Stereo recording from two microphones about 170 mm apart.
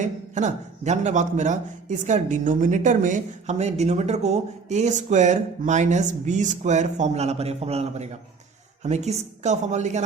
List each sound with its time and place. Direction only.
0.0 s a man's voice: 45° right (ahead or behind)